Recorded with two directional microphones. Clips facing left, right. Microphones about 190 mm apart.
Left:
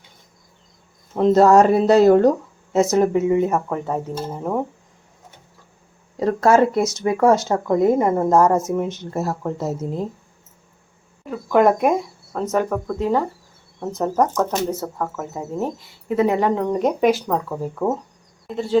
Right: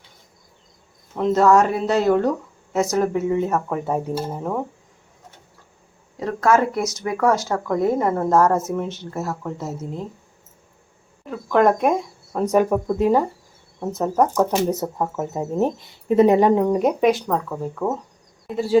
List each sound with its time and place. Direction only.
1.1 s speech: 35° left (ahead or behind)
2.7 s speech: 25° left (ahead or behind)
3.7 s speech: 10° right (ahead or behind)
6.1 s speech: 35° left (ahead or behind)
11.3 s speech: 5° left (ahead or behind)
12.3 s speech: 10° right (ahead or behind); by 17.9 s 10° left (ahead or behind)
18.4 s speech: 5° right (ahead or behind)